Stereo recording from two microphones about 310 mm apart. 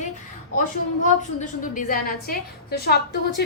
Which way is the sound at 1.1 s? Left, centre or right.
Left.